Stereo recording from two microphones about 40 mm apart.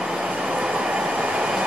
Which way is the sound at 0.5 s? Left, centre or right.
Right.